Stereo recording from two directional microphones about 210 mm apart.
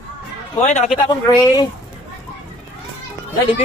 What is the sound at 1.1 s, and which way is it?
Speech, 20° left (ahead or behind).